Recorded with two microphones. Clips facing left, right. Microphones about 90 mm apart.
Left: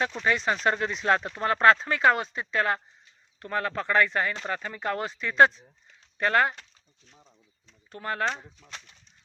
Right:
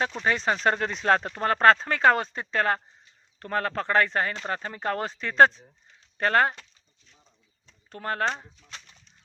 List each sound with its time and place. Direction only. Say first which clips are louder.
0.3 s speech: right 1 dB; 35° right (ahead or behind)
7.9 s speech: right 1 dB; 40° right (ahead or behind)